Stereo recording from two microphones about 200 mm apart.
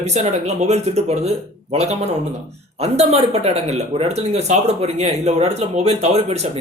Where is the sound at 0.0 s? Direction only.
35° right (ahead or behind).